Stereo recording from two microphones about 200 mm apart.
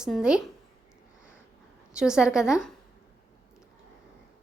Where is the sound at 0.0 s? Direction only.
5° right (ahead or behind).